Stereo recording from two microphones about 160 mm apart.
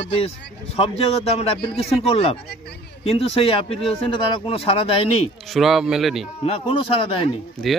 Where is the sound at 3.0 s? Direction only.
35° left (ahead or behind).